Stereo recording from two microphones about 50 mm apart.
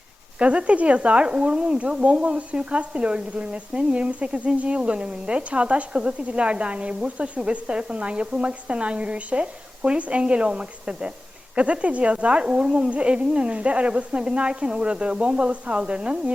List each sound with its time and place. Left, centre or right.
0.3 s speech: right